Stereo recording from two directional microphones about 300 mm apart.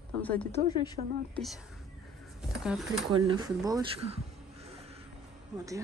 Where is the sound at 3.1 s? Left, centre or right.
Centre.